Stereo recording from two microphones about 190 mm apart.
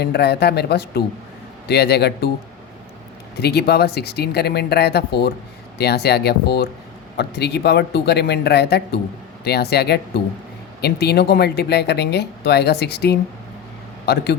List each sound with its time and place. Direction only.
0.0 s speech: 60° left (ahead or behind)
3.4 s a man's voice: 60° left (ahead or behind)